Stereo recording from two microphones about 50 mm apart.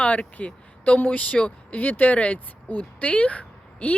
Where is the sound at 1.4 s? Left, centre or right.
Left.